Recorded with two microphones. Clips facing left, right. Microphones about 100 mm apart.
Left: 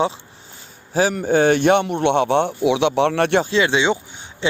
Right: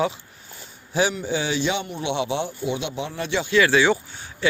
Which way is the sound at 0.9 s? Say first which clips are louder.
Left 6 dB; 45° left (ahead or behind).